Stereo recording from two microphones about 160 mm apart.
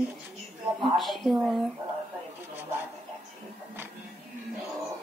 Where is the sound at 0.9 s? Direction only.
Centre (ahead or behind).